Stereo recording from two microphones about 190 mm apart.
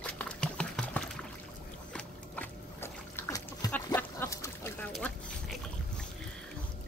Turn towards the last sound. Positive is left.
turn(degrees=5)  # may be behind; listen again after turning